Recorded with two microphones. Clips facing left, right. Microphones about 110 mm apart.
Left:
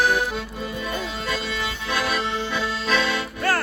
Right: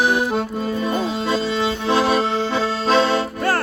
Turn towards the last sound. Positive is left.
turn(degrees=-35)  # may be behind; listen again after turning